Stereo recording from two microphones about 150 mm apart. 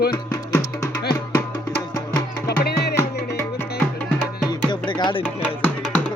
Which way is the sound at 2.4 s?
90° left.